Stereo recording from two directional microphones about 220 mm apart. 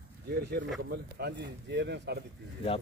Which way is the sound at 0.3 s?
45° right (ahead or behind).